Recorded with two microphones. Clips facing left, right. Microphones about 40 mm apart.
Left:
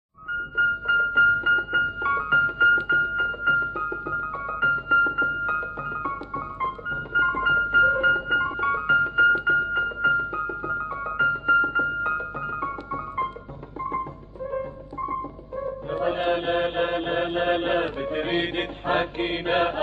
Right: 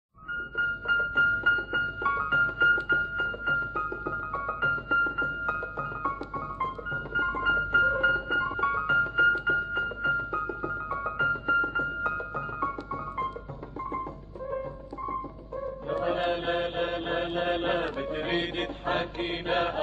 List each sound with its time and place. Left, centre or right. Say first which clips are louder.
0.6 s music: left 5 dB; left
3.7 s keyboard: left 3 dB; left
4.2 s music: left 4 dB; centre
14.5 s music: left 3 dB; left